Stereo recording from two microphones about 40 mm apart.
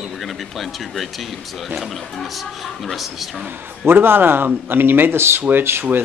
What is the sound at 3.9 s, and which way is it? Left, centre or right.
Speech, right.